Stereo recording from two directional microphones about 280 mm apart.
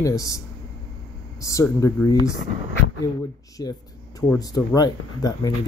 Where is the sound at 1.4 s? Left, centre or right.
Centre.